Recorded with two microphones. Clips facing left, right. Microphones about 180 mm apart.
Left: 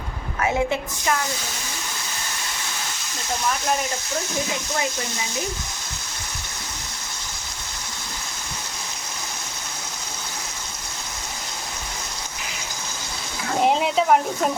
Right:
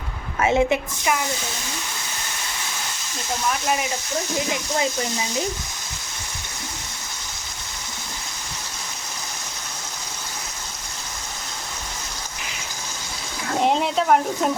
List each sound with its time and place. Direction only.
0.4 s a woman's voice: 15° right (ahead or behind)
13.6 s speech: centre (ahead or behind)